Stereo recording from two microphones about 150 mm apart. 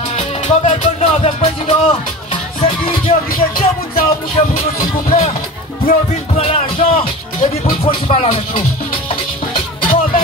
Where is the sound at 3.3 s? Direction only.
75° left (ahead or behind).